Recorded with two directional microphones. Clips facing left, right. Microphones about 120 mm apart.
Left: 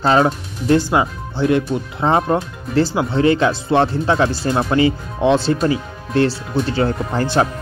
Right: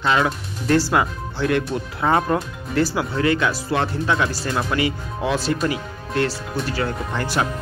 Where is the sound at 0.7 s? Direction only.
20° left (ahead or behind).